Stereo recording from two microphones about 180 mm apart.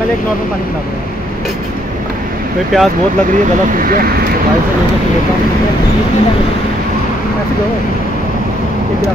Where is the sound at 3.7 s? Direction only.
50° right (ahead or behind).